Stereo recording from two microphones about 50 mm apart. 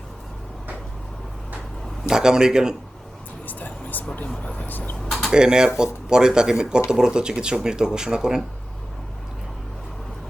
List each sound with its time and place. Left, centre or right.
2.0 s speech: centre
3.4 s vehicle: left
5.0 s a sound: centre
5.3 s speech: centre